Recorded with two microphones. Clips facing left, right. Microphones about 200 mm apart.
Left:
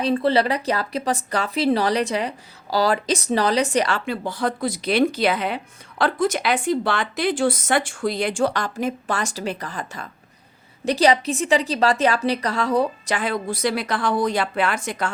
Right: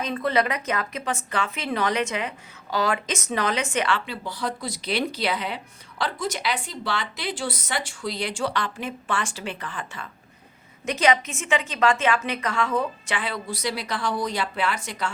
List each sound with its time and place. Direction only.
0.0 s a woman's voice: 30° left (ahead or behind); by 15.1 s 50° left (ahead or behind)